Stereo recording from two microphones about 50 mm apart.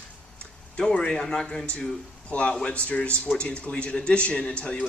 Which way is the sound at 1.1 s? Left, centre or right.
Centre.